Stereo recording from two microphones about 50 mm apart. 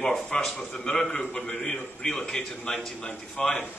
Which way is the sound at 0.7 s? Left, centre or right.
Centre.